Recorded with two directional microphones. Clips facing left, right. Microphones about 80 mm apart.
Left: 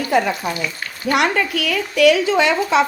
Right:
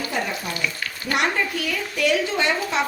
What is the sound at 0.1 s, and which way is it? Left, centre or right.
Frying, left.